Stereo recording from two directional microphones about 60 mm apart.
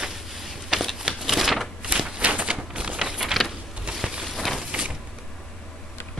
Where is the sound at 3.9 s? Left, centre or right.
Centre.